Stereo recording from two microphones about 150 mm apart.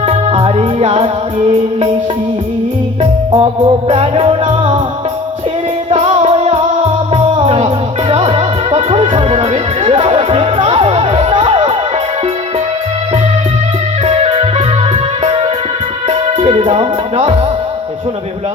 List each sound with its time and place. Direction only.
0.0 s music: 40° right (ahead or behind)
3.0 s music: 35° right (ahead or behind)
5.9 s music: 45° right (ahead or behind)
14.0 s music: 40° right (ahead or behind)